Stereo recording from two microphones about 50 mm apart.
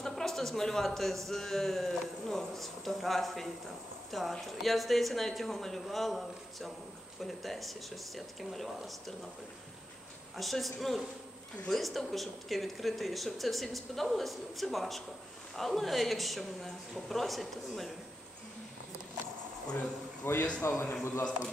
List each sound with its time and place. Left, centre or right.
0.0 s a sound: centre
1.2 s speech: centre
10.3 s speech: centre
20.2 s a man's voice: left